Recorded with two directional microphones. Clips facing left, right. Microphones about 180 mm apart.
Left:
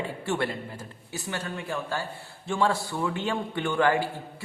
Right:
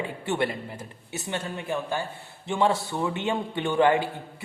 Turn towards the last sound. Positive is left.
turn(degrees=-20)  # may be behind; listen again after turning